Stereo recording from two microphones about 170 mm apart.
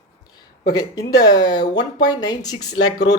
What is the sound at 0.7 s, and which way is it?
Speech, 20° left (ahead or behind).